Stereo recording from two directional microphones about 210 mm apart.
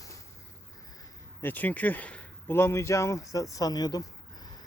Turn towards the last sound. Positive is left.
turn(degrees=20)  # may be behind; listen again after turning